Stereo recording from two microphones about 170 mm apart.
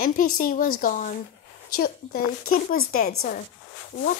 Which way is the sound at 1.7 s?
60° left (ahead or behind).